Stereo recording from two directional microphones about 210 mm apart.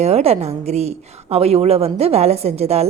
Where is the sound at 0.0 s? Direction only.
30° right (ahead or behind).